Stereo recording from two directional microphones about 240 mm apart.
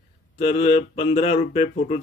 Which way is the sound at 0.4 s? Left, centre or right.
Left.